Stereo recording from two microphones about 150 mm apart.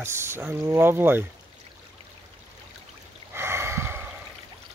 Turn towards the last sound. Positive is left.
turn(degrees=-15)  # may be behind; listen again after turning